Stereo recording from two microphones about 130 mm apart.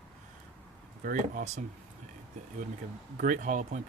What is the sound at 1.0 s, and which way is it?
Speech, 80° right.